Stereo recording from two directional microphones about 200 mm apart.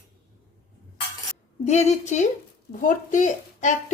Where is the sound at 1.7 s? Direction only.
35° left (ahead or behind).